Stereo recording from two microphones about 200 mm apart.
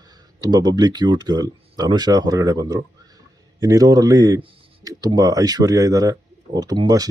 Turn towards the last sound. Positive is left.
turn(degrees=-20)  # may be behind; listen again after turning